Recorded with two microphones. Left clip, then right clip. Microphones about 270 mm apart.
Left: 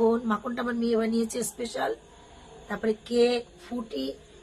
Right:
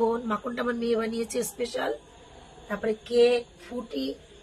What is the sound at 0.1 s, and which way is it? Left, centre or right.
Speech, left.